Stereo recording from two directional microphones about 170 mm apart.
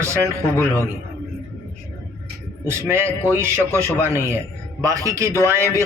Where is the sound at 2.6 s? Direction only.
15° right (ahead or behind).